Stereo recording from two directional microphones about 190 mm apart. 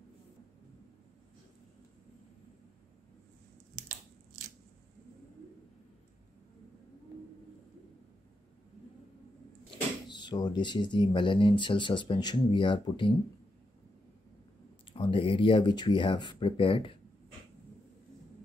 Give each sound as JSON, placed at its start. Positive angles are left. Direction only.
{"t": 10.0, "sound": "speech", "side_deg": 25}
{"t": 14.9, "sound": "speech", "side_deg": 25}